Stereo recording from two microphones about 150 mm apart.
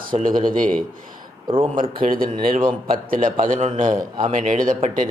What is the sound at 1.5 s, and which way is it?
Speech, 35° right (ahead or behind).